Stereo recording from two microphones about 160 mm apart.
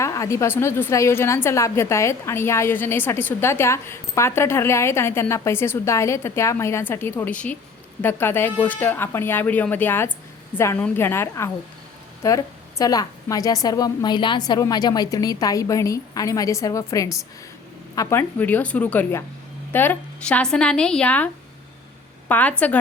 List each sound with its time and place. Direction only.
0.0 s a woman's voice: 20° left (ahead or behind)
22.3 s a woman's voice: 10° left (ahead or behind)